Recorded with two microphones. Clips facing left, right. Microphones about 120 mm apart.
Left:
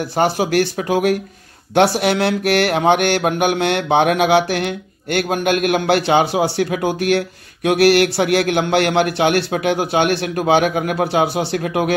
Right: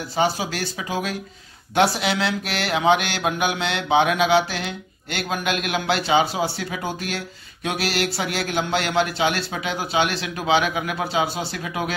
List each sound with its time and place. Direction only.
0.1 s mantra: 60° left (ahead or behind)